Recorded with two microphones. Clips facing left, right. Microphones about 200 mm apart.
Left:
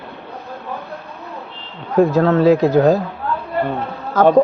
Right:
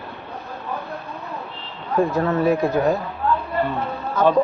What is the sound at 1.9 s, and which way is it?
Speech, 75° left (ahead or behind).